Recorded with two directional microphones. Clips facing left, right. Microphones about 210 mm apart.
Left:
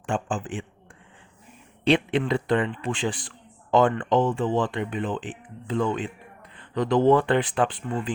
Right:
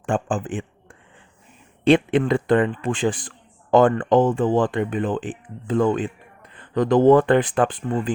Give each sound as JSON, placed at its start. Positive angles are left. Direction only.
{"t": 0.0, "sound": "a man's voice", "side_deg": -50}
{"t": 1.8, "sound": "a man's voice", "side_deg": -50}